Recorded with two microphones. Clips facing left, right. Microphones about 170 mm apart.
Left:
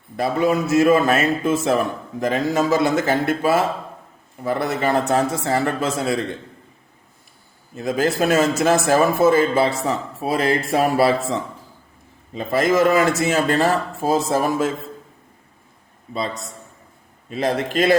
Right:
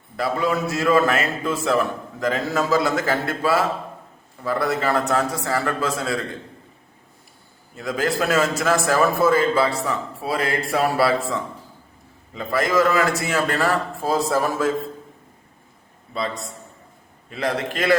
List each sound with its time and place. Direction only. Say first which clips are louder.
0.2 s a man's voice: left 3 dB; 20° left (ahead or behind)
7.8 s a man's voice: left 3 dB; 25° left (ahead or behind)
16.1 s a man's voice: left 1 dB; 20° left (ahead or behind)